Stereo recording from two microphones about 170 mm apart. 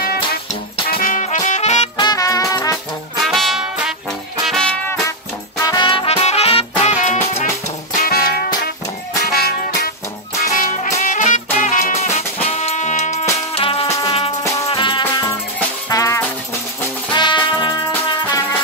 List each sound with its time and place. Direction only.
0.9 s music: 50° left (ahead or behind)
2.0 s music: 20° left (ahead or behind)
3.2 s music: centre (ahead or behind)
5.6 s music: 25° left (ahead or behind); by 7.4 s 40° left (ahead or behind)
8.0 s music: 60° left (ahead or behind)
10.5 s music: 50° left (ahead or behind); by 18.4 s 25° left (ahead or behind)